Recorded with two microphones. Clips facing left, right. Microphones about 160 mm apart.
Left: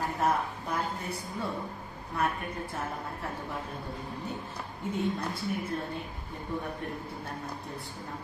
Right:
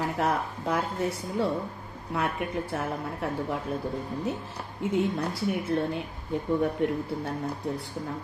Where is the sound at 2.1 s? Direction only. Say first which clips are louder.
Right 3 dB; 75° right (ahead or behind).